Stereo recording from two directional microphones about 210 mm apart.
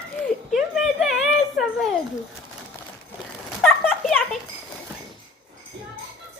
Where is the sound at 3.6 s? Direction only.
Centre (ahead or behind).